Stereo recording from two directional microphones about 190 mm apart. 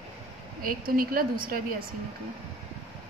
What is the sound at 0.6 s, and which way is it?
A woman's voice, 50° right (ahead or behind).